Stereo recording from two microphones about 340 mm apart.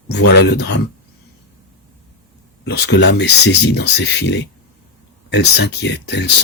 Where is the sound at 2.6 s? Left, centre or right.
Left.